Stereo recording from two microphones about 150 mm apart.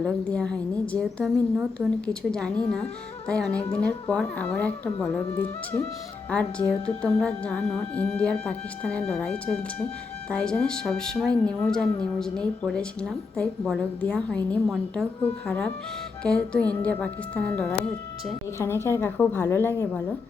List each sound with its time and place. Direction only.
0.0 s speech: 5° left (ahead or behind)